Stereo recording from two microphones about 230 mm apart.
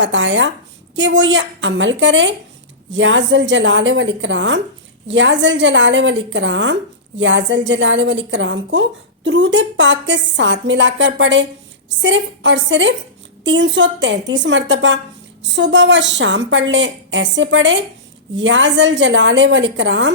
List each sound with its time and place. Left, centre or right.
0.0 s a woman's voice: right